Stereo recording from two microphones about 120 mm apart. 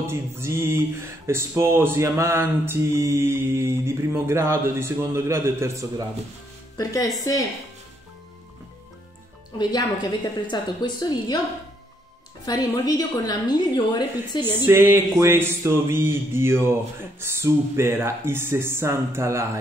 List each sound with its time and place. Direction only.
0.0 s speech: 20° right (ahead or behind)
6.8 s speech: 30° left (ahead or behind)
9.6 s a woman's voice: 35° left (ahead or behind)
12.8 s a woman's voice: 30° left (ahead or behind)
14.4 s speech: 15° right (ahead or behind)